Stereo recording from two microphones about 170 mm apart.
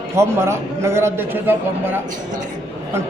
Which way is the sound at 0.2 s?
15° right (ahead or behind).